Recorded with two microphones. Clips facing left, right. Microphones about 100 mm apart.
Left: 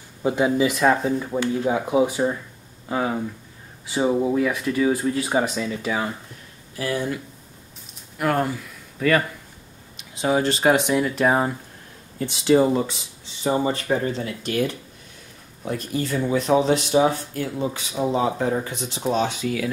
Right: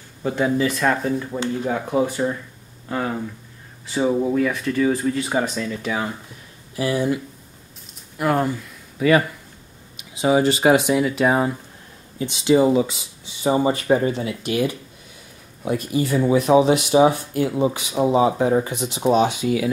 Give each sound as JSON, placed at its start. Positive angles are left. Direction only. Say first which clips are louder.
{"t": 0.2, "sound": "speech", "louder": "left 1 dB", "side_deg": 15}
{"t": 8.2, "sound": "speech", "louder": "right 2 dB", "side_deg": 0}